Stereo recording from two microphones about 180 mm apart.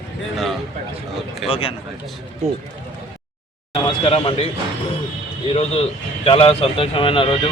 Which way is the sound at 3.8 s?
30° left (ahead or behind).